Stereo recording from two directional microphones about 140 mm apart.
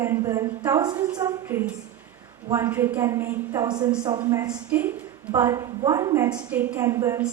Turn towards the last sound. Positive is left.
turn(degrees=-20)  # may be behind; listen again after turning